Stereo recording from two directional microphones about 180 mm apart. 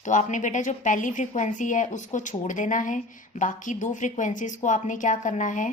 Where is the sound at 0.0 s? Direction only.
45° left (ahead or behind).